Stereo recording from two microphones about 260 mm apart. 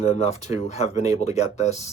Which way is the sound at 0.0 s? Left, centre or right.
Left.